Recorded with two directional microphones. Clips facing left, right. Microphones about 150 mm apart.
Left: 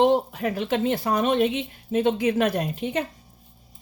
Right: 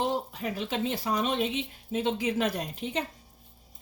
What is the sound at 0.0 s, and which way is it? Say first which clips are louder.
A woman's voice: left 10 dB; 65° left (ahead or behind).